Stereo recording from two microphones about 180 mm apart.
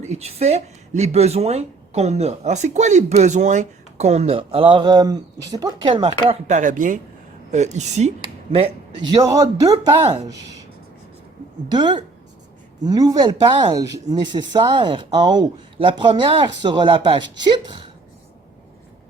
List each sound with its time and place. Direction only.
0.0 s speech: 35° right (ahead or behind)
6.5 s speech: 45° right (ahead or behind)
8.5 s speech: 25° right (ahead or behind)
11.7 s speech: 25° right (ahead or behind)